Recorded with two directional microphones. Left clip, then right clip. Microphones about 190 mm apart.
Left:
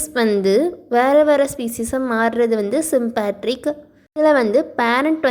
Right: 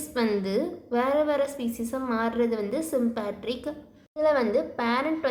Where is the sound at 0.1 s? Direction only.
35° left (ahead or behind).